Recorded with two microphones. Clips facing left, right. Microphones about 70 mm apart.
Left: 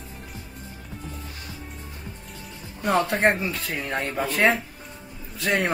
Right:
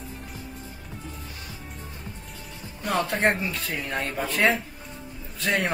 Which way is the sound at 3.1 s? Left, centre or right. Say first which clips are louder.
Left 2 dB; centre.